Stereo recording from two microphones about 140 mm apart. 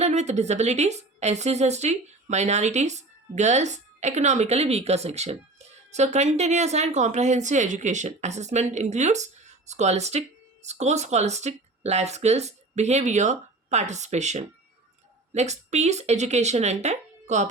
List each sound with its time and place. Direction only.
0.0 s a woman's voice: 55° right (ahead or behind)